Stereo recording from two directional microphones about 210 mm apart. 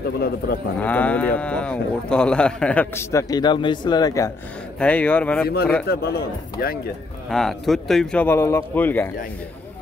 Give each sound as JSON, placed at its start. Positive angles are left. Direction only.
{"t": 0.7, "sound": "speech", "side_deg": 5}
{"t": 4.7, "sound": "speech", "side_deg": 5}
{"t": 5.9, "sound": "a man's voice", "side_deg": 50}
{"t": 7.2, "sound": "speech", "side_deg": 0}